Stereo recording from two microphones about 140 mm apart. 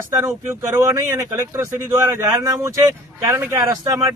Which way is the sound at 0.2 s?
20° right (ahead or behind).